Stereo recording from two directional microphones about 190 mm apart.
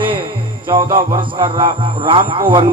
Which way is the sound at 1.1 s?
25° right (ahead or behind).